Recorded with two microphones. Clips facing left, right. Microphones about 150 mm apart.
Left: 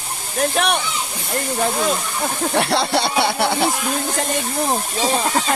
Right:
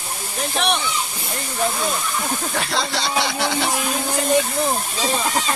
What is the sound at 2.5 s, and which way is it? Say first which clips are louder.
Speech: left 9 dB; 65° left (ahead or behind).